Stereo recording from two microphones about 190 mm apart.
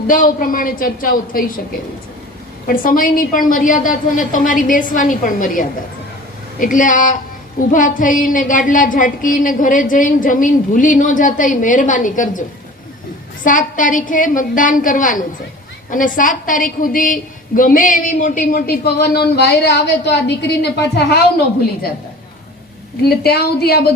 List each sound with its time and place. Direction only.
0.1 s a woman's voice: 45° left (ahead or behind)
2.6 s a woman's voice: 45° left (ahead or behind)
13.4 s a woman's voice: 45° left (ahead or behind); by 21.2 s 60° left (ahead or behind)
23.0 s speech: 55° left (ahead or behind)